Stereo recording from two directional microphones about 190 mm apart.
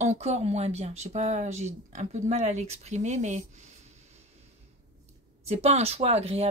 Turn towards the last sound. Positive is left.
turn(degrees=-35)  # may be behind; listen again after turning